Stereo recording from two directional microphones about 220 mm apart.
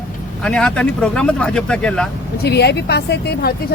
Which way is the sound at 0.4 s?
5° left (ahead or behind).